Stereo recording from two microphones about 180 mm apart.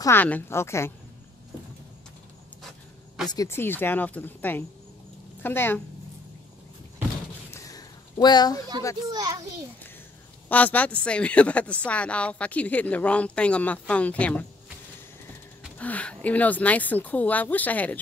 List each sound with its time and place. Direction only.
0.0 s a woman's voice: 10° left (ahead or behind)
3.3 s a woman's voice: 15° left (ahead or behind)
7.5 s a sound: 20° left (ahead or behind)
9.1 s a child's voice: 20° right (ahead or behind)
10.5 s a woman's voice: 10° left (ahead or behind)
15.8 s a woman's voice: 5° left (ahead or behind)